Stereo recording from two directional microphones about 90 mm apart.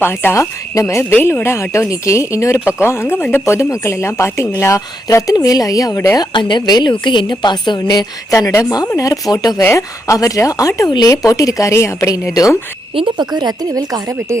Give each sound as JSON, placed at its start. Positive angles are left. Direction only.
{"t": 0.0, "sound": "speech", "side_deg": 25}
{"t": 6.1, "sound": "a woman's voice", "side_deg": 55}
{"t": 8.3, "sound": "speech", "side_deg": 35}
{"t": 9.6, "sound": "speech", "side_deg": 35}
{"t": 12.9, "sound": "speech", "side_deg": -85}
{"t": 13.1, "sound": "a woman's voice", "side_deg": -50}